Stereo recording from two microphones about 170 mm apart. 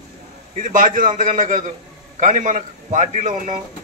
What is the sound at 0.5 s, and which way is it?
A man's voice, 50° right (ahead or behind).